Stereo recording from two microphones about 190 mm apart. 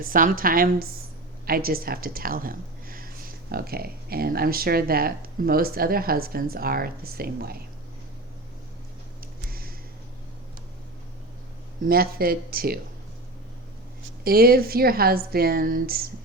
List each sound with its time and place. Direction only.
0.0 s speech: 45° right (ahead or behind)
9.5 s a sound: 50° right (ahead or behind)
11.9 s speech: 50° right (ahead or behind)
14.3 s speech: 50° right (ahead or behind)